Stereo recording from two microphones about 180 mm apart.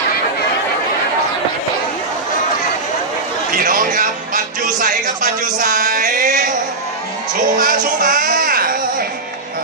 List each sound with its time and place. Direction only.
3.5 s a sound: 50° right (ahead or behind)
4.8 s music: 50° right (ahead or behind)
7.5 s music: 50° right (ahead or behind)